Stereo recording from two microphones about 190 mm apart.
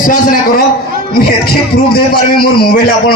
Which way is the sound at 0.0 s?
45° left (ahead or behind).